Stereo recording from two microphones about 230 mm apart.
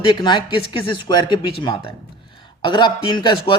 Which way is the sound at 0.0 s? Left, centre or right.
Centre.